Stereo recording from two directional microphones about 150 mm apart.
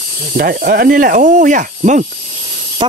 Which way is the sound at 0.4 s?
80° right.